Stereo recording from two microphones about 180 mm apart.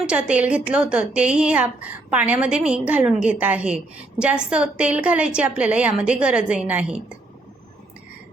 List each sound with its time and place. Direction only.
0.0 s a woman's voice: 5° right (ahead or behind)